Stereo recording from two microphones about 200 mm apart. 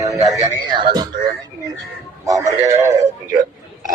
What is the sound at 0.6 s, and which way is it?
Speech, 20° right (ahead or behind).